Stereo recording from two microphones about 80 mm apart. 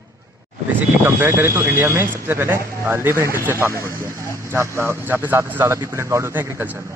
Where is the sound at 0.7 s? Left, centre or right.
Right.